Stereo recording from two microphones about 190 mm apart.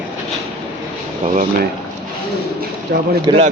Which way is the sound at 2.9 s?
60° right (ahead or behind).